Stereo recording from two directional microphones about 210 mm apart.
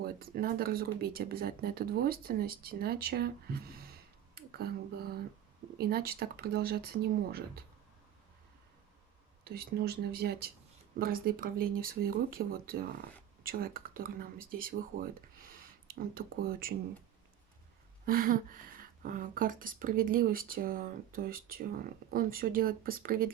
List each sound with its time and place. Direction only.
0.0 s speech: 45° right (ahead or behind)
9.4 s speech: 50° right (ahead or behind)
18.0 s speech: 45° right (ahead or behind)